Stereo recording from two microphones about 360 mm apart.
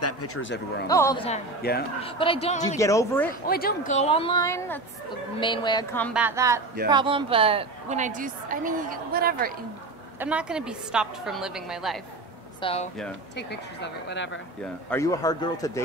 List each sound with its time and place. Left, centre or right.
0.0 s speech: left
0.8 s a woman's voice: centre; by 1.9 s left
2.0 s a woman's voice: centre
3.4 s a woman's voice: left; by 9.5 s right
10.1 s a woman's voice: centre
12.6 s a woman's voice: centre
13.4 s speech: left
14.9 s a woman's voice: centre